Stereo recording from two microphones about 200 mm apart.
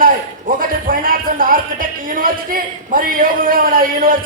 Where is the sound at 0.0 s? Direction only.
45° right (ahead or behind).